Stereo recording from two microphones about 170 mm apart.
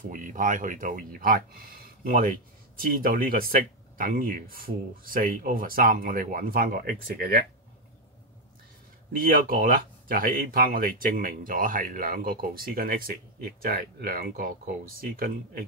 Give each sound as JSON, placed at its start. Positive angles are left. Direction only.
{"t": 0.0, "sound": "speech", "side_deg": -50}
{"t": 9.1, "sound": "speech", "side_deg": -55}